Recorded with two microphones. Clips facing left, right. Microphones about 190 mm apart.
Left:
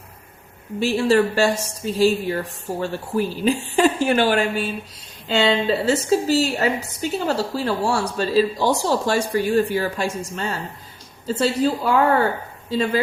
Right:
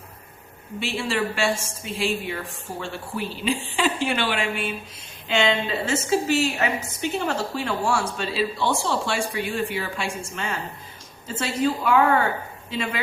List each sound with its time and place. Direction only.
0.8 s speech: 40° left (ahead or behind)